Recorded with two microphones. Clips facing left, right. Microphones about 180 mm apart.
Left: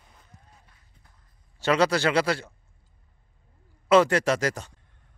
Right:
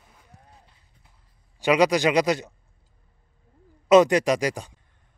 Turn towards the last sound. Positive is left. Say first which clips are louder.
# right 2 dB
turn(degrees=-15)  # may be behind; listen again after turning